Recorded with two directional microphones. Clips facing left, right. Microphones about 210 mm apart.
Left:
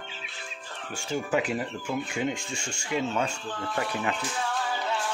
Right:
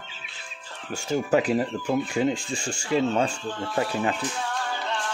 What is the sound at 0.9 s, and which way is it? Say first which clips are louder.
Speech: right 5 dB; 40° right (ahead or behind).